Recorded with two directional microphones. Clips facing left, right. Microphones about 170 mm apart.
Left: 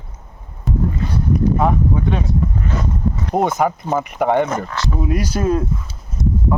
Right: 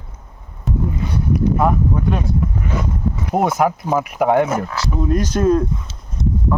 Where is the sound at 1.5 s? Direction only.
5° right (ahead or behind).